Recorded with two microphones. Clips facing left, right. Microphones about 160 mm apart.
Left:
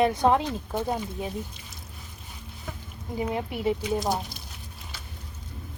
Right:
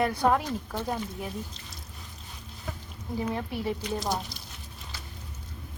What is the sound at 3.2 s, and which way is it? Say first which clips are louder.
Speech: left 2 dB; 15° left (ahead or behind).